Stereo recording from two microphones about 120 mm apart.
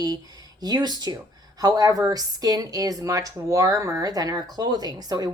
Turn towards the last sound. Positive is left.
turn(degrees=-35)  # may be behind; listen again after turning